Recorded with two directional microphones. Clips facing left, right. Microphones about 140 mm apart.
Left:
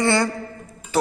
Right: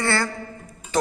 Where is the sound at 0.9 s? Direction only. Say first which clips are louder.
Left 2 dB; 10° left (ahead or behind).